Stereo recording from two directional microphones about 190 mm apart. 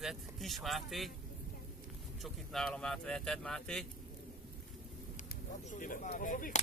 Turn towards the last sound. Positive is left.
turn(degrees=45)  # may be behind; listen again after turning